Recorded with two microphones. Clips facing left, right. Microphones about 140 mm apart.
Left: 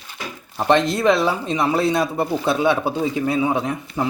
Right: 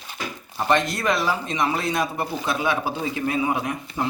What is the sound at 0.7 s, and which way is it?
Speech, 30° left (ahead or behind).